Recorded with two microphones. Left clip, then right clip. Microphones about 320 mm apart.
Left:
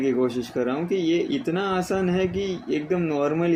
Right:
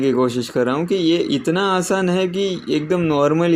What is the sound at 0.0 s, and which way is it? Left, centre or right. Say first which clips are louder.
Speech: right 5 dB; right.